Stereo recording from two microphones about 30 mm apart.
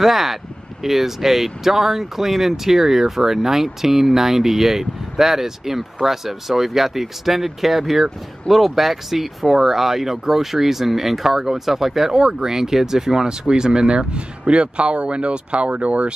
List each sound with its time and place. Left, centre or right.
0.0 s speech: centre
12.1 s speech: right
12.4 s speech: centre; by 16.1 s right